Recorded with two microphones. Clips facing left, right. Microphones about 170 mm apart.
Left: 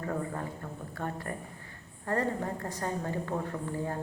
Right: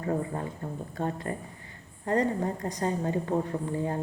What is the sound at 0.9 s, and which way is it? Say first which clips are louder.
A woman's voice: right 4 dB; 20° right (ahead or behind).